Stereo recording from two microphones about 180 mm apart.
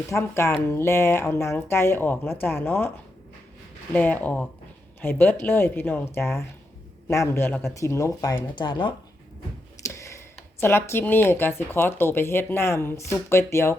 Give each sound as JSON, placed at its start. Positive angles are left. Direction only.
{"t": 0.1, "sound": "speech", "side_deg": 15}
{"t": 3.9, "sound": "speech", "side_deg": 10}